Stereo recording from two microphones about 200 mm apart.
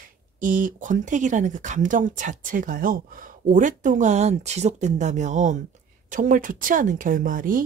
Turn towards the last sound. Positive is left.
turn(degrees=-45)  # may be behind; listen again after turning